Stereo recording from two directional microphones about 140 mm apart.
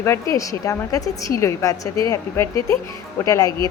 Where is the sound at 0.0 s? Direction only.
20° left (ahead or behind).